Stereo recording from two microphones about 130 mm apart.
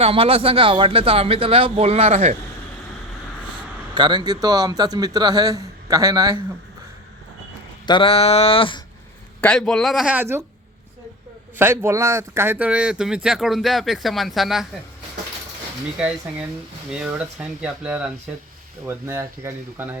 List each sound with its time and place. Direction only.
0.0 s speech: 45° right (ahead or behind)
3.9 s a man's voice: 35° right (ahead or behind)
7.9 s a sound: 40° left (ahead or behind)
9.4 s speech: 5° left (ahead or behind)
10.1 s speech: 15° right (ahead or behind)
11.5 s speech: 15° right (ahead or behind)
16.0 s speech: 10° right (ahead or behind)
18.9 s a man's voice: 25° right (ahead or behind)